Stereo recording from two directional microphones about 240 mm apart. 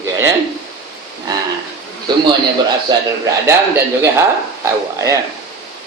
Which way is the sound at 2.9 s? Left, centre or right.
Centre.